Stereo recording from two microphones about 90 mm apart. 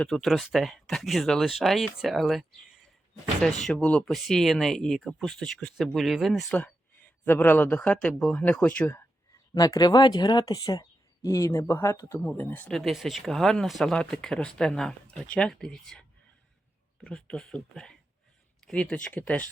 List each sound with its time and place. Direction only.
0.0 s speech: 5° left (ahead or behind)
6.5 s speech: 15° left (ahead or behind)
9.6 s speech: 45° left (ahead or behind)
12.2 s speech: 20° left (ahead or behind)
12.7 s speech: centre (ahead or behind)